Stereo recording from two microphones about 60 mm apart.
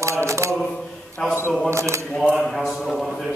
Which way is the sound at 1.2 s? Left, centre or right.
Centre.